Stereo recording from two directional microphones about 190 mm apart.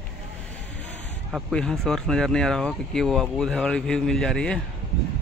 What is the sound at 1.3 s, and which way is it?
Speech, 5° left (ahead or behind).